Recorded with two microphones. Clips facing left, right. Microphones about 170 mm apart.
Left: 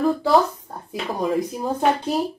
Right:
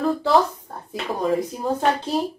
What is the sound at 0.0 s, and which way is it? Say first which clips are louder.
Speech: left 1 dB; centre (ahead or behind).